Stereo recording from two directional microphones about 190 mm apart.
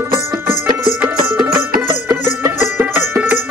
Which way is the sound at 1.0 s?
10° right (ahead or behind).